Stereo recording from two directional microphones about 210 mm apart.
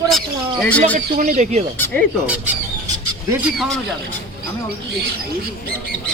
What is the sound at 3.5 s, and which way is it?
Speech, centre (ahead or behind).